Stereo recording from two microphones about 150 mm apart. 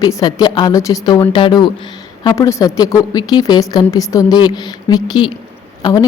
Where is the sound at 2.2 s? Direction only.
20° left (ahead or behind).